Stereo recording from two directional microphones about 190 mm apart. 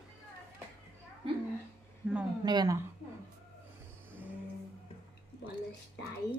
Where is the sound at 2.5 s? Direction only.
20° right (ahead or behind).